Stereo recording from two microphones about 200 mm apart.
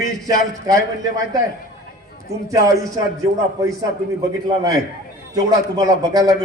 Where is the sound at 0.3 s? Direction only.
15° right (ahead or behind).